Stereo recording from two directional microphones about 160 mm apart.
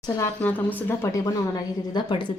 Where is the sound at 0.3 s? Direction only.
10° left (ahead or behind).